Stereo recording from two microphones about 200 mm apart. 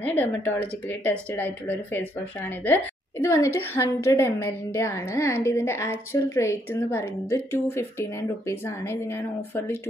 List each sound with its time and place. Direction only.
0.0 s a woman's voice: 10° left (ahead or behind)